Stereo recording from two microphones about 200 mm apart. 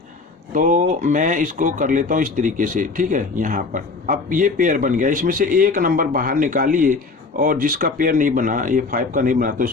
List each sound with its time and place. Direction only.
0.5 s speech: 40° right (ahead or behind)